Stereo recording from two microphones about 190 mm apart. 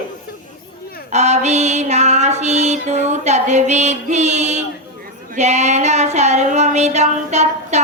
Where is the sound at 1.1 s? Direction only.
35° right (ahead or behind).